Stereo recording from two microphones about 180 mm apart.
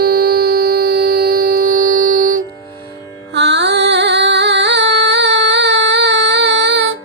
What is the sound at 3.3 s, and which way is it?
Music, 75° right (ahead or behind).